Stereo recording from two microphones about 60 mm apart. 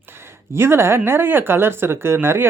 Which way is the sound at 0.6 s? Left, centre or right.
Right.